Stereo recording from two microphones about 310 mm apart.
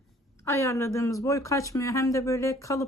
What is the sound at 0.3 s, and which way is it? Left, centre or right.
Speech, centre.